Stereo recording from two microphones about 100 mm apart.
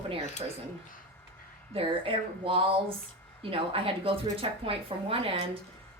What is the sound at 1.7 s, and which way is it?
Speech, 65° right (ahead or behind).